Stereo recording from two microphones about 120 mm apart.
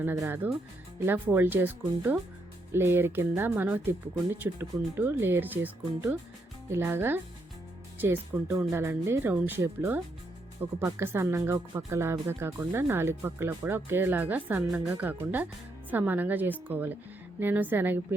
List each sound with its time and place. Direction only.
0.0 s speech: 20° right (ahead or behind)